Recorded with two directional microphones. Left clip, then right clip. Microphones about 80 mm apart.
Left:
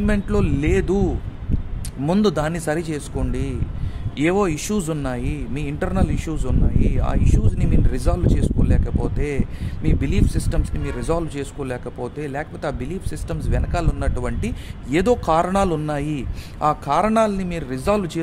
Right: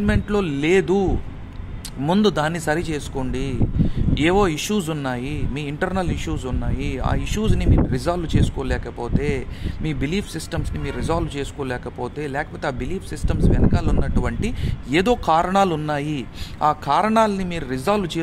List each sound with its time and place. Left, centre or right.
0.0 s speech: left